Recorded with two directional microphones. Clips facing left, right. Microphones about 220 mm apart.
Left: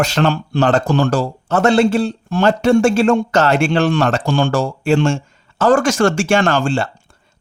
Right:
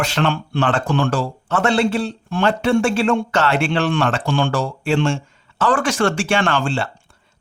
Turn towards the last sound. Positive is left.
turn(degrees=45)  # may be behind; listen again after turning